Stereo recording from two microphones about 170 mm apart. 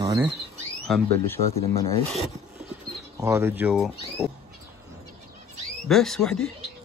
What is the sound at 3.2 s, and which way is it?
Speech, 15° right (ahead or behind).